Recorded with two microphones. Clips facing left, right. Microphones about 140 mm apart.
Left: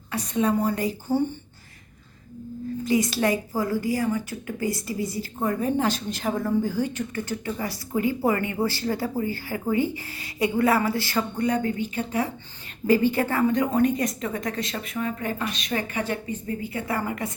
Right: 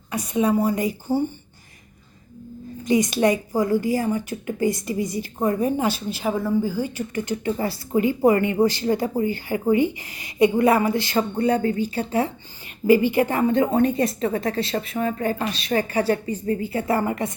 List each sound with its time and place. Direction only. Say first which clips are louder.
0.1 s a woman's voice: right 3 dB; 10° right (ahead or behind)
2.8 s a woman's voice: right 4 dB; 20° right (ahead or behind); by 7.0 s 5° right (ahead or behind)
7.1 s a woman's voice: right 5 dB; 20° right (ahead or behind)
11.2 s speech: right 4 dB; 30° right (ahead or behind)
12.9 s a woman's voice: right 4 dB; 15° right (ahead or behind)
13.5 s speech: right 3 dB; 30° right (ahead or behind)